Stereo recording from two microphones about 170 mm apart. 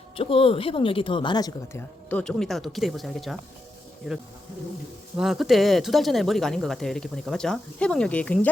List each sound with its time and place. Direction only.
0.2 s speech: 30° left (ahead or behind)
2.0 s speech: 5° left (ahead or behind)